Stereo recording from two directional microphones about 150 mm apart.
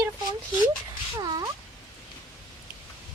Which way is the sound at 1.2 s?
25° right (ahead or behind).